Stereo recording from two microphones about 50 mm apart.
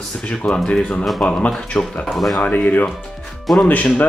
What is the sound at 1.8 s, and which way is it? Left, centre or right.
Speech, left.